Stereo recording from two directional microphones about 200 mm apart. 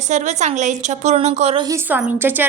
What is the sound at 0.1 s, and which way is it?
A woman's voice, 35° right (ahead or behind).